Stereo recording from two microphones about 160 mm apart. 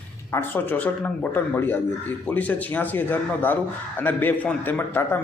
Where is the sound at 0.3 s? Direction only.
10° left (ahead or behind).